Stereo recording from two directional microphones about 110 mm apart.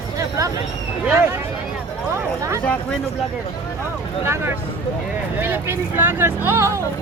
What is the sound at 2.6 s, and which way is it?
Speech, 15° left (ahead or behind).